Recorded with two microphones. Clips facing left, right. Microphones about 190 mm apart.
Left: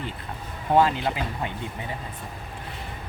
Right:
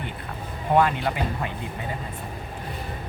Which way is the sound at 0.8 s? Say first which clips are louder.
Left 1 dB; 25° left (ahead or behind).